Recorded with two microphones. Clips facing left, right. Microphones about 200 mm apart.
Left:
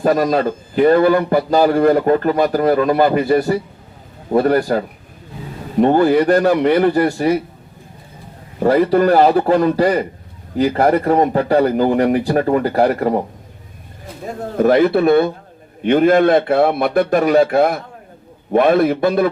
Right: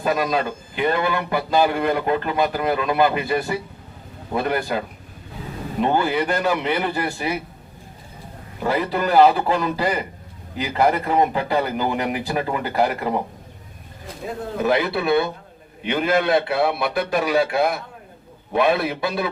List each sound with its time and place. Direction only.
0.0 s speech: 45° left (ahead or behind)
5.8 s a man's voice: 45° left (ahead or behind)
8.5 s a man's voice: 45° left (ahead or behind)
10.8 s speech: 40° left (ahead or behind)
14.6 s a man's voice: 50° left (ahead or behind)